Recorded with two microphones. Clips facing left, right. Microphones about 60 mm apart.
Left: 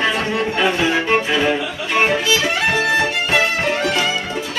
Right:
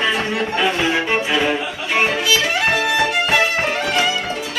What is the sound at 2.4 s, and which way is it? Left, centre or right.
Music, centre.